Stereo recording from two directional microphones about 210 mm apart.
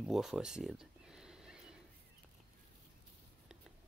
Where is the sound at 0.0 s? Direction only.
Centre (ahead or behind).